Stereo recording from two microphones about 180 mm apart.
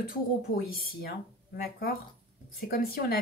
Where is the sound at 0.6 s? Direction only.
60° left (ahead or behind).